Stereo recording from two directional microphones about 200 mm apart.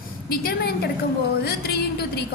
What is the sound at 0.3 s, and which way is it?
A woman's voice, 50° left (ahead or behind).